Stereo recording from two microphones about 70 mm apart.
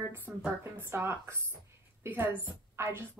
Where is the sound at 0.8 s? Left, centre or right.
Right.